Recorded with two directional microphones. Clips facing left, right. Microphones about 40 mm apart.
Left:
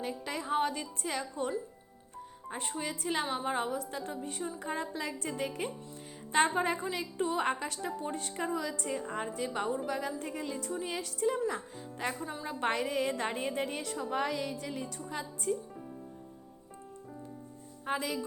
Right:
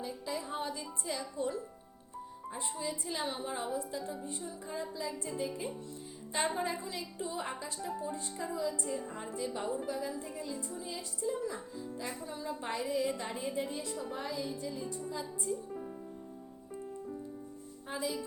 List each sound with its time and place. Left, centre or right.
0.0 s a woman's voice: left
2.5 s a woman's voice: left
12.2 s a woman's voice: left
12.5 s a woman's voice: left
17.8 s speech: left